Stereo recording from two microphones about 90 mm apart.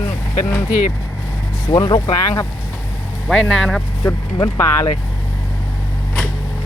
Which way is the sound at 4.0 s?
30° left (ahead or behind).